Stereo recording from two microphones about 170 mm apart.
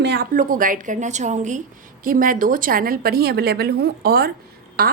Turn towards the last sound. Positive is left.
turn(degrees=-65)  # may be behind; listen again after turning